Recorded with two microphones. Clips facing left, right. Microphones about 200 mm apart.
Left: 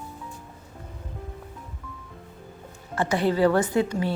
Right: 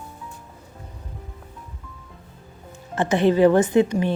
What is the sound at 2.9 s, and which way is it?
A woman's voice, 20° right (ahead or behind).